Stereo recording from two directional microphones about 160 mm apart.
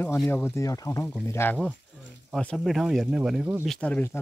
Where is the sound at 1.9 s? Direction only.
5° left (ahead or behind).